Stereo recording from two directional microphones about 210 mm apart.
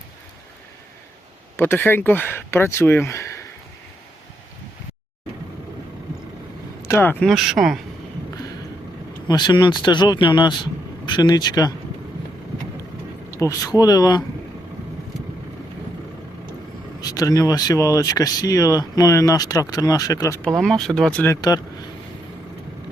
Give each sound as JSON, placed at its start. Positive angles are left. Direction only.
{"t": 1.5, "sound": "speech", "side_deg": 10}
{"t": 6.8, "sound": "speech", "side_deg": 10}
{"t": 9.3, "sound": "speech", "side_deg": 20}
{"t": 13.4, "sound": "speech", "side_deg": 15}
{"t": 17.0, "sound": "speech", "side_deg": 20}
{"t": 20.6, "sound": "speech", "side_deg": 0}